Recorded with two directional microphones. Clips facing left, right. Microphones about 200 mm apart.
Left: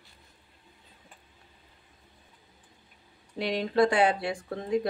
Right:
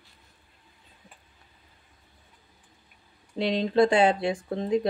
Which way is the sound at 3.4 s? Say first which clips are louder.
Right 3 dB; 25° right (ahead or behind).